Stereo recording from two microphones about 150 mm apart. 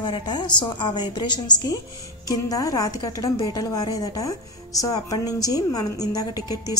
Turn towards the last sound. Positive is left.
turn(degrees=25)  # may be behind; listen again after turning